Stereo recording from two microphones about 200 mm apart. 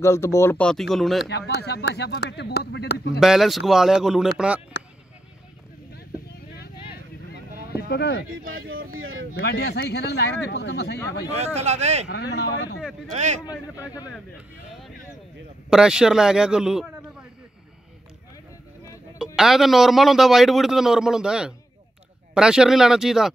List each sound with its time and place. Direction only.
0.0 s speech: 15° left (ahead or behind)
1.3 s speech: 55° left (ahead or behind)
3.2 s a man's voice: centre (ahead or behind)
7.9 s speech: 55° left (ahead or behind)
8.5 s speech: 90° right
9.4 s speech: 55° left (ahead or behind)
11.3 s speech: 35° right (ahead or behind)
12.1 s speech: 55° left (ahead or behind)
13.1 s speech: 35° right (ahead or behind)
13.5 s speech: 15° left (ahead or behind)
15.7 s a man's voice: 5° right (ahead or behind)
19.1 s a man's voice: centre (ahead or behind)